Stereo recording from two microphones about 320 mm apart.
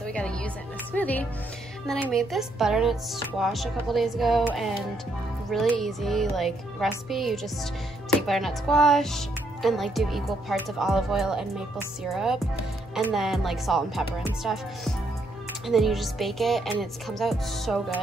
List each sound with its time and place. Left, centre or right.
0.0 s music: centre
0.9 s speech: centre